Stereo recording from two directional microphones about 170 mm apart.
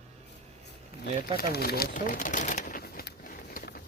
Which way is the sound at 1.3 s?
65° left (ahead or behind).